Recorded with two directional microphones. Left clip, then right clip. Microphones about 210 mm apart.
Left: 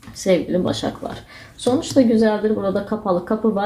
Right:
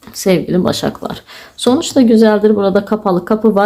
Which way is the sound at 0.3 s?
45° right (ahead or behind).